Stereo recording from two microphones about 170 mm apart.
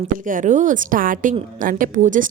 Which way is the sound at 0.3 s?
50° right (ahead or behind).